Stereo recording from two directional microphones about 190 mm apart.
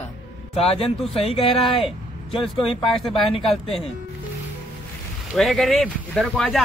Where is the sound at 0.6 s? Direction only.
30° left (ahead or behind).